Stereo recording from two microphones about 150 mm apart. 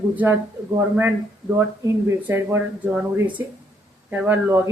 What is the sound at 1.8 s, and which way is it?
Speech, 15° right (ahead or behind).